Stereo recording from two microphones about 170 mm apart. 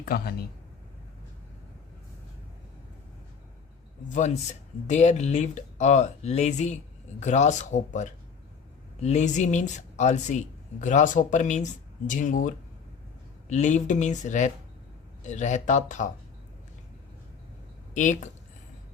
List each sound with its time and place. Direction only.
0.0 s speech: 65° left (ahead or behind)
4.9 s speech: 40° left (ahead or behind)
17.9 s speech: 45° left (ahead or behind)